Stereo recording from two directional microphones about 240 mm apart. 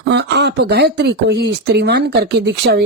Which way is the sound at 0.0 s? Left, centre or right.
Right.